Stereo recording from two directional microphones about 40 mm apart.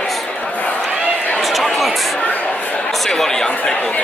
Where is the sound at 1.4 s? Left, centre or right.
Centre.